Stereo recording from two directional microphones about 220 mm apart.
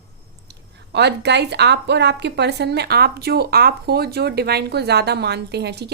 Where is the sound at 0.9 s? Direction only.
50° right (ahead or behind).